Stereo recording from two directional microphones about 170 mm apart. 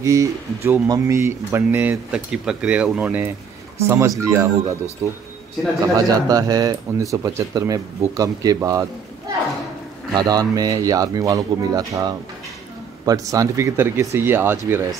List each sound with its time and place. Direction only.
0.0 s a man's voice: 20° right (ahead or behind)
10.1 s a man's voice: 20° right (ahead or behind)